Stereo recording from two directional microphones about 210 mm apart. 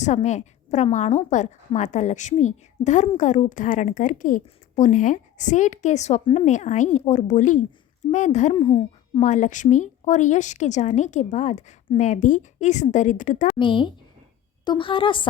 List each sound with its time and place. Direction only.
0.0 s a woman's voice: 35° left (ahead or behind)
8.5 s speech: 20° left (ahead or behind)
9.2 s a woman's voice: 35° left (ahead or behind)
13.6 s a woman's voice: 25° left (ahead or behind)